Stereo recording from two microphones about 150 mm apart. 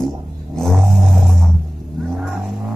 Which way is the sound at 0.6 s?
Centre (ahead or behind).